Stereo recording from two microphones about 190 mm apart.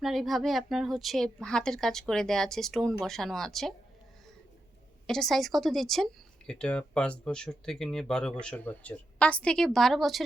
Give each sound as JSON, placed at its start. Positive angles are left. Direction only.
{"t": 0.0, "sound": "speech", "side_deg": 0}
{"t": 5.0, "sound": "speech", "side_deg": 0}